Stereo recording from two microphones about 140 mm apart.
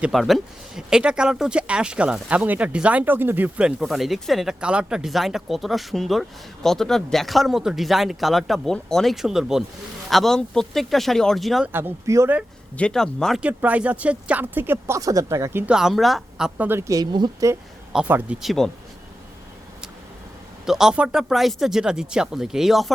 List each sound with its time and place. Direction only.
0.0 s speech: centre (ahead or behind)
11.7 s speech: 15° right (ahead or behind)
12.7 s speech: 5° left (ahead or behind)
13.4 s speech: 10° right (ahead or behind)
15.7 s speech: 5° right (ahead or behind)
16.6 s speech: 15° right (ahead or behind); by 17.5 s 30° right (ahead or behind)
17.9 s speech: 5° right (ahead or behind)
20.7 s speech: 5° right (ahead or behind)